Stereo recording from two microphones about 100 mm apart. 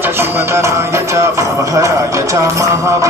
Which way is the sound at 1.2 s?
30° right (ahead or behind).